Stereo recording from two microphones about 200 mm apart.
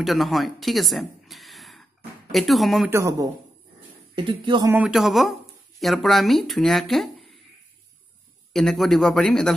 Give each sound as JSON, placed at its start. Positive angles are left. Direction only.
{"t": 0.0, "sound": "speech", "side_deg": 0}
{"t": 2.9, "sound": "speech", "side_deg": -15}
{"t": 4.6, "sound": "speech", "side_deg": -5}
{"t": 8.5, "sound": "speech", "side_deg": 0}